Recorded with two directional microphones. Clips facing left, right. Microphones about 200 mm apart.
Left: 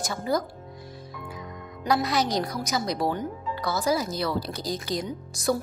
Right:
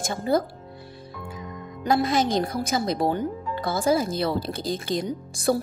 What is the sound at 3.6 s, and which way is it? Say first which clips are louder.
Speech: right 2 dB; 50° right (ahead or behind).